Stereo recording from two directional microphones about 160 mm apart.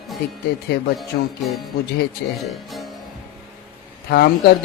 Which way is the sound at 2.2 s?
90° left.